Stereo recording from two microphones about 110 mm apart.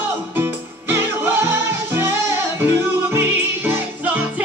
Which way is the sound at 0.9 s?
20° right (ahead or behind).